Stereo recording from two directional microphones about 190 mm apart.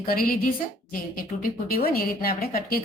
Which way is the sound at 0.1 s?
50° left (ahead or behind).